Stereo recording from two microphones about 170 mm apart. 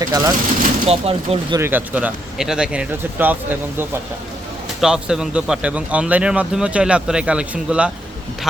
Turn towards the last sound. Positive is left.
turn(degrees=-5)  # may be behind; listen again after turning